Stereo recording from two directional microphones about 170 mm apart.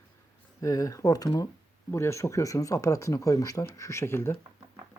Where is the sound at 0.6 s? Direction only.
20° left (ahead or behind).